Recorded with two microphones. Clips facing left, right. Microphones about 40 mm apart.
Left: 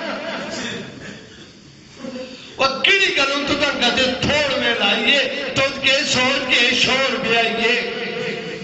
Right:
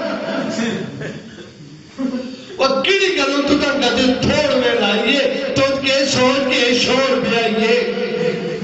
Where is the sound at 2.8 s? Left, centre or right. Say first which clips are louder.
Right 1 dB; left.